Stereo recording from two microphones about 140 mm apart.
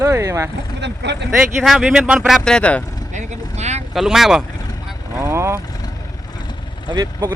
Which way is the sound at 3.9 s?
5° right (ahead or behind).